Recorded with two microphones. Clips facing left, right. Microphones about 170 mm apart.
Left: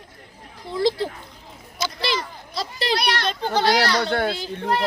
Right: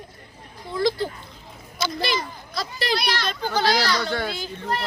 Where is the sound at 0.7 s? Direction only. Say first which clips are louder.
Left 1 dB; 30° left (ahead or behind).